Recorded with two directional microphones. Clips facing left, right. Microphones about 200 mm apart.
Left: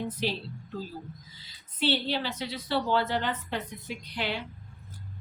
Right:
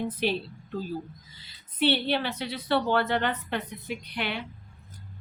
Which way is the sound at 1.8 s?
60° right (ahead or behind).